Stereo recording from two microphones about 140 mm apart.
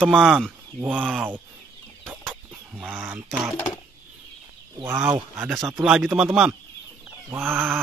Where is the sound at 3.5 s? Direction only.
20° left (ahead or behind).